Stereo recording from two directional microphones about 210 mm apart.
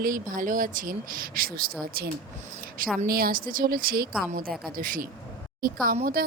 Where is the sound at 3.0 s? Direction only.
45° right (ahead or behind).